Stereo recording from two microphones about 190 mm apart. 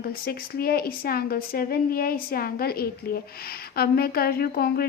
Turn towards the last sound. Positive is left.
turn(degrees=55)  # may be behind; listen again after turning